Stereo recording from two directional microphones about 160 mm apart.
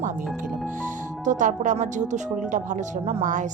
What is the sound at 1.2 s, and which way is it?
Speech, 50° right (ahead or behind).